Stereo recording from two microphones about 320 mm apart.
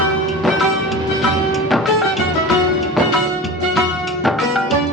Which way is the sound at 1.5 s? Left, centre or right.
Centre.